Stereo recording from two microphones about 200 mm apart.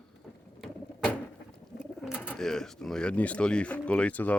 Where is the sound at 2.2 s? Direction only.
5° left (ahead or behind).